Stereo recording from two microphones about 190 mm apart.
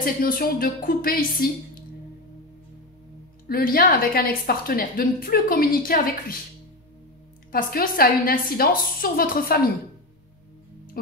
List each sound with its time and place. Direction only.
0.0 s a woman's voice: 50° left (ahead or behind)
3.4 s a woman's voice: 50° left (ahead or behind)
7.5 s a woman's voice: 50° left (ahead or behind)